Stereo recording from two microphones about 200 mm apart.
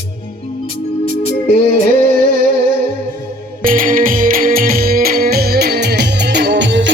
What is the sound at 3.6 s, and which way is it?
Music, 45° right (ahead or behind).